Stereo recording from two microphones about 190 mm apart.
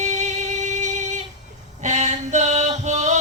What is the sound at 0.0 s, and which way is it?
Music, 40° right (ahead or behind).